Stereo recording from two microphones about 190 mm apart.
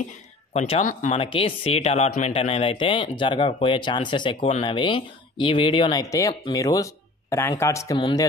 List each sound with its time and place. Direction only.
0.5 s speech: 35° left (ahead or behind)